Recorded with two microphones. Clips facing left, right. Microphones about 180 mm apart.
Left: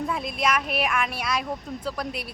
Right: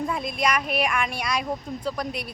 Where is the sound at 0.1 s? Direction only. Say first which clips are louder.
Right 1 dB; centre (ahead or behind).